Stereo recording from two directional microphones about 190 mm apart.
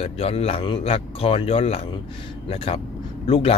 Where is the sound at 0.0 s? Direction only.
30° left (ahead or behind).